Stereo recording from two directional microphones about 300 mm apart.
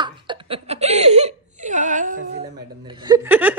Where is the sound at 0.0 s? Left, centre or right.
Centre.